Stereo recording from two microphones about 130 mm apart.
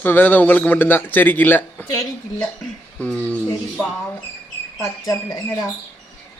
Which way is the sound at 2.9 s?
10° left (ahead or behind).